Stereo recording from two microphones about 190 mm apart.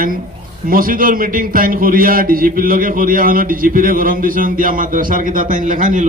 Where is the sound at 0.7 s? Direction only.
50° right (ahead or behind).